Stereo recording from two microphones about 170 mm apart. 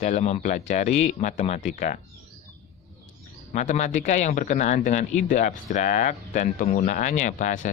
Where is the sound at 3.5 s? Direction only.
45° left (ahead or behind).